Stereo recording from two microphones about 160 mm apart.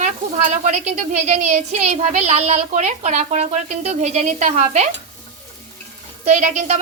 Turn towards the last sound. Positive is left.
turn(degrees=-45)  # may be behind; listen again after turning